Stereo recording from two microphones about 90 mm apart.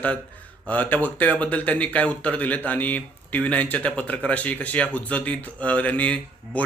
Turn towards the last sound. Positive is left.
turn(degrees=15)  # may be behind; listen again after turning